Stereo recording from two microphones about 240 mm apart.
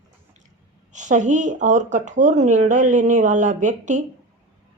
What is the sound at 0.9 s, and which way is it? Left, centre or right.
Speech, right.